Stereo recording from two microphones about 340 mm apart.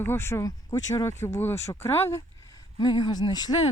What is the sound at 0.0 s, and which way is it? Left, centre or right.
Speech, centre.